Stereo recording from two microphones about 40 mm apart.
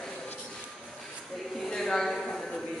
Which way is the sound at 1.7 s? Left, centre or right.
Centre.